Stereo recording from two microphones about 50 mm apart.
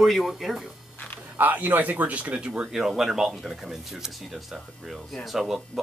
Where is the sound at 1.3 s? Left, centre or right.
Right.